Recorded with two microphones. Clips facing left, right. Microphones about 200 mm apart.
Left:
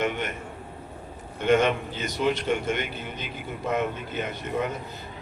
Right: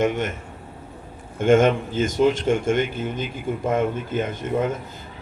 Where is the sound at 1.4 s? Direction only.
45° right (ahead or behind).